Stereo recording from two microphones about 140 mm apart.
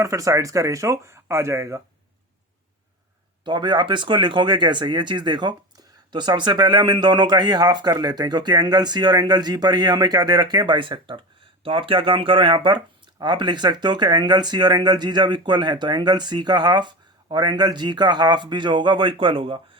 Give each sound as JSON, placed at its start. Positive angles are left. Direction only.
{"t": 0.0, "sound": "speech", "side_deg": -20}
{"t": 3.4, "sound": "speech", "side_deg": -30}